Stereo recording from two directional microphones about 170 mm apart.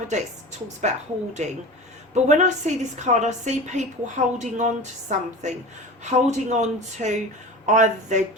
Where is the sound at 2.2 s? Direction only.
45° right (ahead or behind).